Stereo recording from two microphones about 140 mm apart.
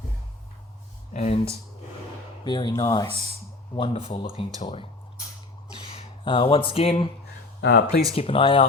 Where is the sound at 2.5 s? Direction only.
35° left (ahead or behind).